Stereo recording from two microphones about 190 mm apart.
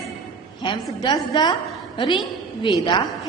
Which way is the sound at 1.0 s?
20° left (ahead or behind).